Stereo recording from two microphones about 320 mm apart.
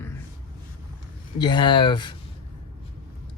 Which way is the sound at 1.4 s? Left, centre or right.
Centre.